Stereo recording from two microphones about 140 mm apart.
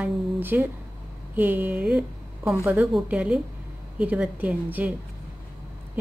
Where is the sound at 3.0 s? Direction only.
10° right (ahead or behind).